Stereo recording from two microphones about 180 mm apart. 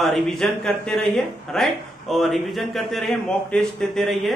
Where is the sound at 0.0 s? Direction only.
Centre (ahead or behind).